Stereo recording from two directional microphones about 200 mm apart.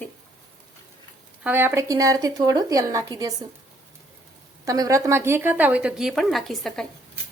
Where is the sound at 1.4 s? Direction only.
10° right (ahead or behind).